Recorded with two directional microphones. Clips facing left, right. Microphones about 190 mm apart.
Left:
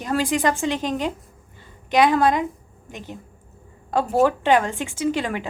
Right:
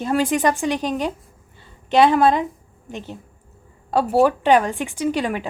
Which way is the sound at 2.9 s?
15° left (ahead or behind).